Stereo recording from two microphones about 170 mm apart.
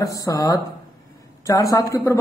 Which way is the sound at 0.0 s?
20° left (ahead or behind).